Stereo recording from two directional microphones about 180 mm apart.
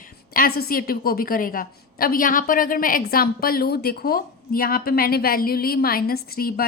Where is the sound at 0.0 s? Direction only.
55° left (ahead or behind).